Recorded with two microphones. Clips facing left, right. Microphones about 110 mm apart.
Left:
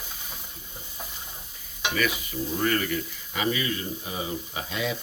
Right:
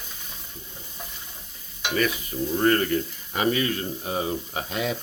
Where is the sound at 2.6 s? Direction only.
40° right (ahead or behind).